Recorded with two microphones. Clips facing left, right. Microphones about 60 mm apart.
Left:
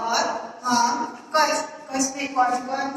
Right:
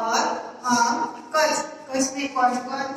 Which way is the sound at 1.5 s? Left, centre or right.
Left.